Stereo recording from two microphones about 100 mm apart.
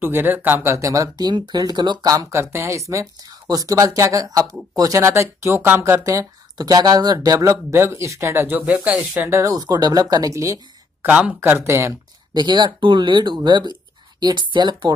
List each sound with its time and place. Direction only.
0.0 s speech: 20° right (ahead or behind)
0.6 s speech: 30° right (ahead or behind)
9.4 s speech: 40° right (ahead or behind)
11.1 s speech: 15° right (ahead or behind)
12.4 s speech: 50° right (ahead or behind)